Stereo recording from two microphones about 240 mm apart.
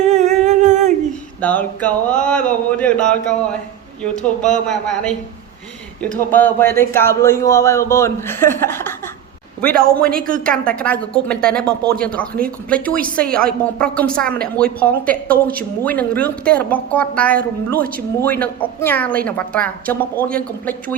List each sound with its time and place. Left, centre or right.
0.0 s music: right
1.4 s a woman's voice: centre
6.3 s speech: centre
9.8 s speech: right
10.8 s a woman's voice: centre
13.0 s speech: right
13.7 s a woman's voice: centre